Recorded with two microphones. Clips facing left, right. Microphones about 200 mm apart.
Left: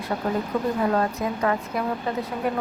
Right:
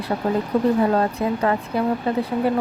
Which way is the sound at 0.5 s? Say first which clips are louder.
Right 6 dB; 35° right (ahead or behind).